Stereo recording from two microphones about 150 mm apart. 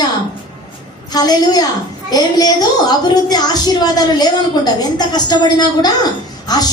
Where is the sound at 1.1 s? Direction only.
25° left (ahead or behind).